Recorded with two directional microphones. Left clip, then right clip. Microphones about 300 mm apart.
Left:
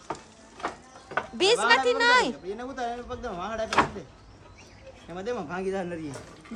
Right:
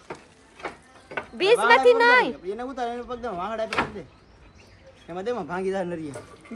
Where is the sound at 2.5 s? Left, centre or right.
Right.